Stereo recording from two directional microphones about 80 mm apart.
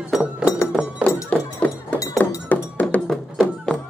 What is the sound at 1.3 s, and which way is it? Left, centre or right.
Music, centre.